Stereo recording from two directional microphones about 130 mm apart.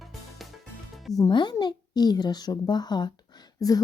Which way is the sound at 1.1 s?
30° left (ahead or behind).